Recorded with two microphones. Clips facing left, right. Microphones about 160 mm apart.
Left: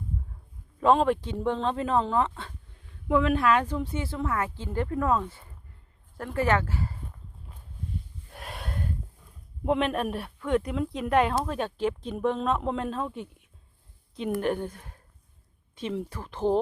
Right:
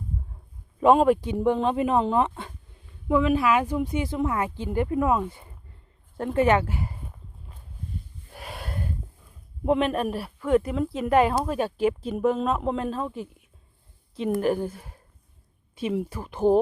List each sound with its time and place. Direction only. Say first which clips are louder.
0.8 s speech: right 4 dB; 10° right (ahead or behind)
3.1 s speech: right 2 dB; centre (ahead or behind)
8.3 s gasp: right 1 dB; centre (ahead or behind)
9.6 s speech: right 3 dB; centre (ahead or behind)
14.4 s speech: right 4 dB; 5° right (ahead or behind)